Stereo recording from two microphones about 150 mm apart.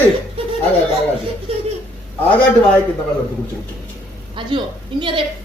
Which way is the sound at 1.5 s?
40° right (ahead or behind).